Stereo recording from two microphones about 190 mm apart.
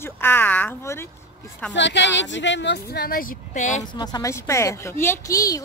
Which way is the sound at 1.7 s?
70° left (ahead or behind).